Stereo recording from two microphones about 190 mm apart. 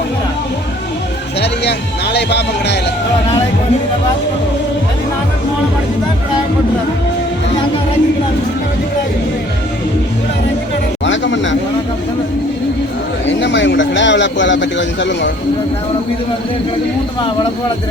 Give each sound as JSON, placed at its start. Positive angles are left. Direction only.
{"t": 1.4, "sound": "speech", "side_deg": 60}
{"t": 11.0, "sound": "a sound", "side_deg": 75}
{"t": 13.2, "sound": "speech", "side_deg": 70}